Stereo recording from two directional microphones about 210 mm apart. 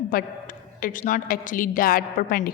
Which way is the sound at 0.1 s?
40° left (ahead or behind).